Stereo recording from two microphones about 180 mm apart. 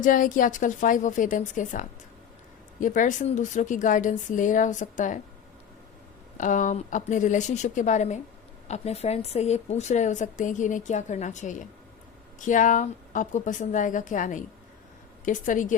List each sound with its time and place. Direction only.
0.0 s a woman's voice: 45° left (ahead or behind)
2.8 s a woman's voice: 45° left (ahead or behind)
6.3 s a woman's voice: 45° left (ahead or behind)